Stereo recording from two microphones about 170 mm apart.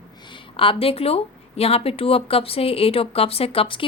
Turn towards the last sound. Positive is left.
turn(degrees=30)  # may be behind; listen again after turning